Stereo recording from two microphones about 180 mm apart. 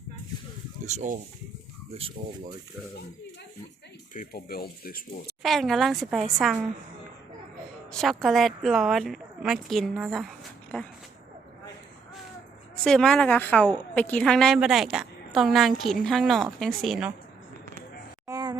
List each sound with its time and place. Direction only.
0.9 s speech: 45° right (ahead or behind)
4.1 s speech: 50° left (ahead or behind)
5.4 s a woman's voice: centre (ahead or behind)
7.9 s a woman's voice: centre (ahead or behind)
12.7 s a woman's voice: 5° left (ahead or behind)
18.3 s a sound: 20° right (ahead or behind)